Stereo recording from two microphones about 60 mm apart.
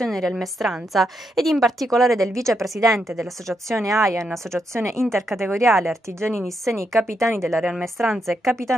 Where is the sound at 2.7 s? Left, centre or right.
Right.